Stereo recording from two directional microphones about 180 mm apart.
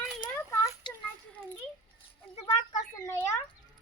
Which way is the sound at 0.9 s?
25° left (ahead or behind).